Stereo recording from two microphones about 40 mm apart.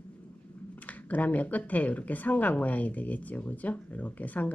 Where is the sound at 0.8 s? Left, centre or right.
Left.